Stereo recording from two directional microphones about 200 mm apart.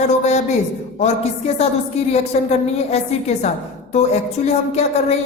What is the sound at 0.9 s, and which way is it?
A woman's voice, 30° left (ahead or behind).